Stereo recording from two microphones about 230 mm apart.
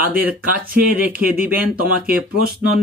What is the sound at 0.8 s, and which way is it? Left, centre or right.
Speech, right.